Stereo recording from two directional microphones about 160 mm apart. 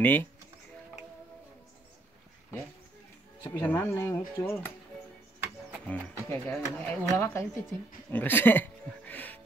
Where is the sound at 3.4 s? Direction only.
10° left (ahead or behind).